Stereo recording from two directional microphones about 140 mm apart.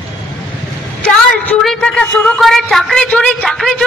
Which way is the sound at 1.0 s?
10° left (ahead or behind).